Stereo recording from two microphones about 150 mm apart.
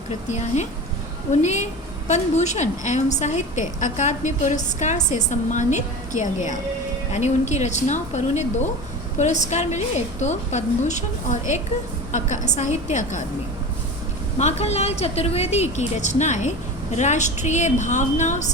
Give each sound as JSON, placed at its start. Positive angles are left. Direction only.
{"t": 0.3, "sound": "a woman's voice", "side_deg": 50}
{"t": 14.3, "sound": "a woman's voice", "side_deg": 45}